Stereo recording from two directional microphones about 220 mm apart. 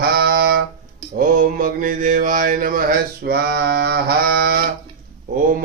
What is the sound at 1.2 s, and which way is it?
Mantra, 40° right (ahead or behind).